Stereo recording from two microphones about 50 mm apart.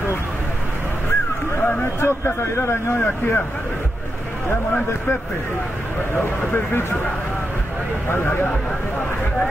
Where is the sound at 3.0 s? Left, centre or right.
Left.